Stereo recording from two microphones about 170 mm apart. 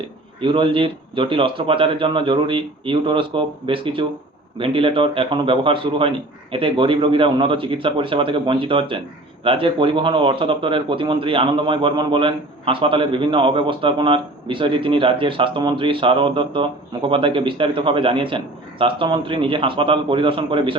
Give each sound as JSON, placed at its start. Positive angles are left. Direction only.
{"t": 0.4, "sound": "speech", "side_deg": -30}